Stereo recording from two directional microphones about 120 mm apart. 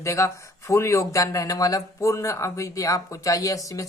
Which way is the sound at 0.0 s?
25° left (ahead or behind).